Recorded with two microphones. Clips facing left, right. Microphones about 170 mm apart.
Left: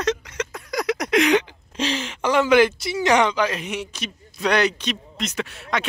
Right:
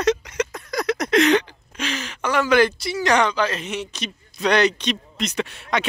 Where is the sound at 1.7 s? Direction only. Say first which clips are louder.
Left 4 dB; 30° left (ahead or behind).